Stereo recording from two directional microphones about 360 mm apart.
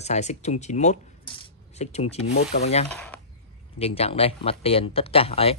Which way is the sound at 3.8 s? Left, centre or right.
Centre.